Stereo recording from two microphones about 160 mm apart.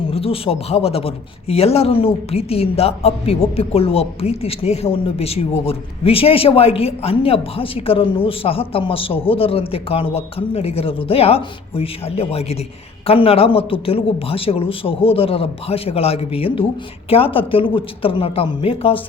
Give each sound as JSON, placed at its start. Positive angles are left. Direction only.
{"t": 0.1, "sound": "a man's voice", "side_deg": 35}